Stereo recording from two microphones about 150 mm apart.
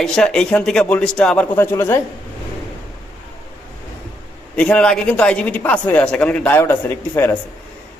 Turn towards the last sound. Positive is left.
turn(degrees=15)  # may be behind; listen again after turning